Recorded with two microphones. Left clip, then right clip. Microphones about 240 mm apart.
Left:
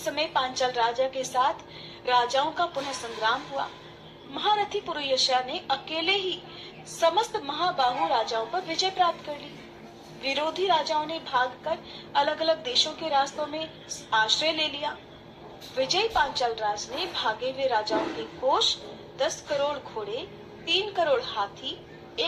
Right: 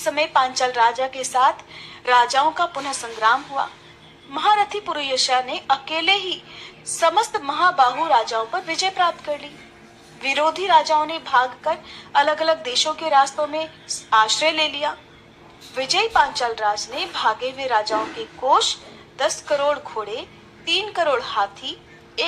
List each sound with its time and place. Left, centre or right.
0.0 s a woman's voice: right
10.2 s a woman's voice: right
19.1 s a woman's voice: right